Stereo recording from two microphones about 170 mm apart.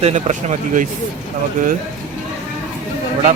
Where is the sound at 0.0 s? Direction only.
45° right (ahead or behind).